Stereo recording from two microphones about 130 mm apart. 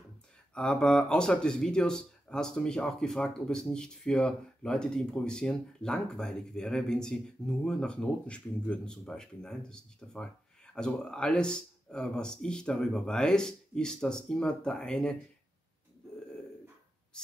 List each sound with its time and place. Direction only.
0.6 s speech: 5° left (ahead or behind)